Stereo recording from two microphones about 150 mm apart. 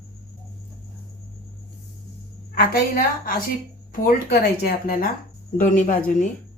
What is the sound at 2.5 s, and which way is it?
Speech, 75° left (ahead or behind).